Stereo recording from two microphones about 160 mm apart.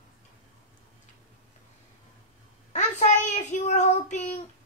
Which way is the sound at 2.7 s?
45° left (ahead or behind).